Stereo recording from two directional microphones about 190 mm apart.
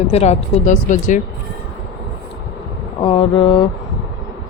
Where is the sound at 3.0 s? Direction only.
30° left (ahead or behind).